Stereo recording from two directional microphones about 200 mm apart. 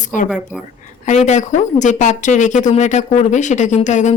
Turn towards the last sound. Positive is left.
turn(degrees=35)  # may be behind; listen again after turning